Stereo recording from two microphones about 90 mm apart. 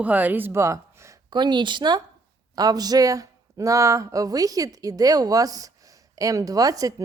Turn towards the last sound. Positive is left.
turn(degrees=-40)  # may be behind; listen again after turning